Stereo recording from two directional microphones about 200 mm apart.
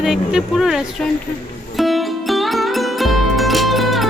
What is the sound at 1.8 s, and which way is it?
Music, centre (ahead or behind).